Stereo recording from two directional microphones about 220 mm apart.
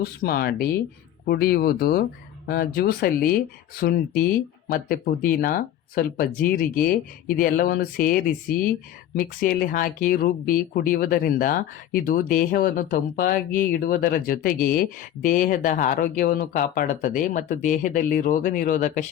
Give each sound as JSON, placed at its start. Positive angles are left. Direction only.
{"t": 0.0, "sound": "speech", "side_deg": 45}